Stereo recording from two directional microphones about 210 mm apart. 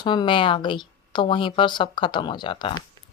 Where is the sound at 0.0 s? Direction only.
20° left (ahead or behind).